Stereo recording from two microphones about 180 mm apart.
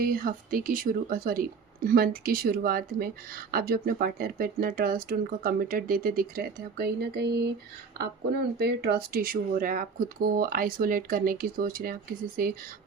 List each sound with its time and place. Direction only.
0.0 s speech: 55° right (ahead or behind)